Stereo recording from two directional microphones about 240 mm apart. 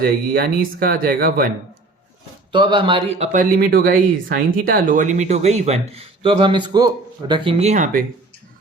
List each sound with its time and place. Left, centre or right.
0.0 s speech: right
2.5 s speech: centre